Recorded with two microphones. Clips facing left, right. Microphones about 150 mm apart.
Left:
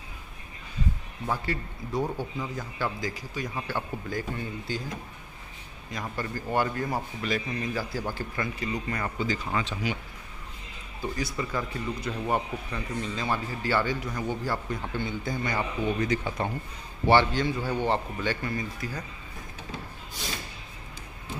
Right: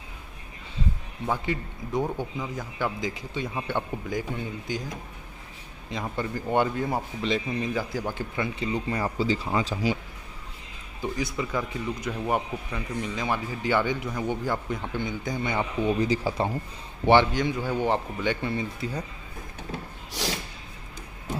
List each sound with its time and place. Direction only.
1.3 s a man's voice: 20° right (ahead or behind)
2.3 s speech: 5° right (ahead or behind)
2.8 s a man's voice: 20° right (ahead or behind)
11.0 s a man's voice: 15° right (ahead or behind)
15.9 s speech: 30° right (ahead or behind)
17.0 s a man's voice: 15° right (ahead or behind)
20.1 s a sound: 85° right